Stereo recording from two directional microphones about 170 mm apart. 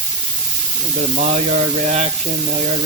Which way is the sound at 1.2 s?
40° right (ahead or behind).